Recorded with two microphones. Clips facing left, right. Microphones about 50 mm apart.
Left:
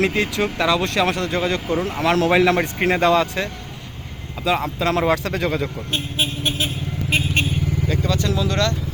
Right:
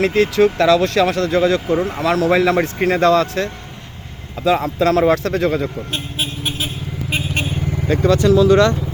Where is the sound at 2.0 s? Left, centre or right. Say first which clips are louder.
Even; left.